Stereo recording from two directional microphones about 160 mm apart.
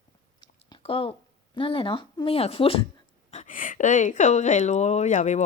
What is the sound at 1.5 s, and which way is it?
Speech, 35° left (ahead or behind).